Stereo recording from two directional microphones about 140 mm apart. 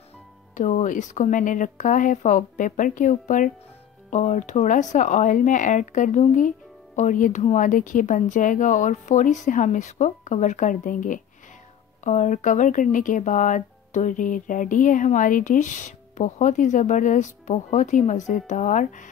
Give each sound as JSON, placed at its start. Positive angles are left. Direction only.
{"t": 0.6, "sound": "speech", "side_deg": 60}
{"t": 12.0, "sound": "speech", "side_deg": 60}